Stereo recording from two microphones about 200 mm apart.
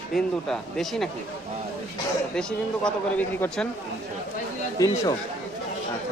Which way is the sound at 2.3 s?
5° left (ahead or behind).